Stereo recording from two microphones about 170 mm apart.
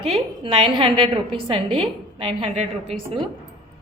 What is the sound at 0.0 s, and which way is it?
A woman's voice, 35° right (ahead or behind).